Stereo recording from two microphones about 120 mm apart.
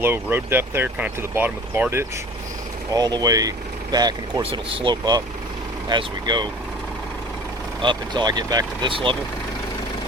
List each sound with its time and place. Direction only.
0.0 s speech: 20° right (ahead or behind)
2.9 s speech: 35° right (ahead or behind)
7.8 s speech: 40° right (ahead or behind)